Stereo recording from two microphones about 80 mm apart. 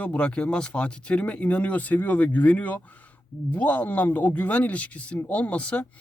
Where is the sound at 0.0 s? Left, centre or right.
Centre.